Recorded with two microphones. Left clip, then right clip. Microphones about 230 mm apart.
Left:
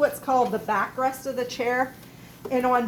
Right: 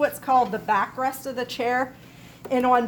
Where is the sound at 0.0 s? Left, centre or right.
Right.